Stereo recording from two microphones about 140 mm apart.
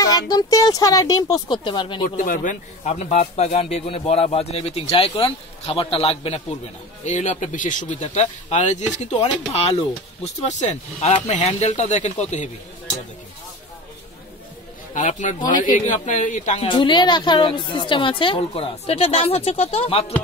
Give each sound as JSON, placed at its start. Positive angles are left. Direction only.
{"t": 0.0, "sound": "speech", "side_deg": 30}
{"t": 2.0, "sound": "speech", "side_deg": 80}
{"t": 7.1, "sound": "speech", "side_deg": 60}
{"t": 15.0, "sound": "speech", "side_deg": 60}
{"t": 16.6, "sound": "a woman's voice", "side_deg": 35}